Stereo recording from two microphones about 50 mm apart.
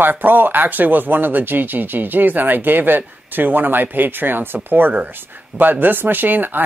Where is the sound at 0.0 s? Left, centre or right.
Right.